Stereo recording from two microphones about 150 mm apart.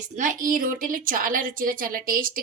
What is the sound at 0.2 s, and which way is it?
A woman's voice, 60° right (ahead or behind).